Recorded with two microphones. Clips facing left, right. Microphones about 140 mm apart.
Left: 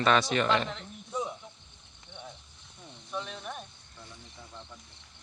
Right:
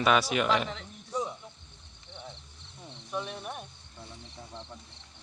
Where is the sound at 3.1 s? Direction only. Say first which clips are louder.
Right 2 dB; 10° right (ahead or behind).